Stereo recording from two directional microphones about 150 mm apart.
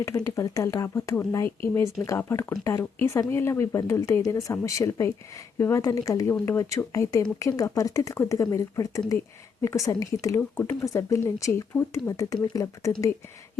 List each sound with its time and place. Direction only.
0.0 s speech: 20° left (ahead or behind)